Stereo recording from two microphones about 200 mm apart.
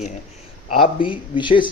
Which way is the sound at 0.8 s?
25° left (ahead or behind).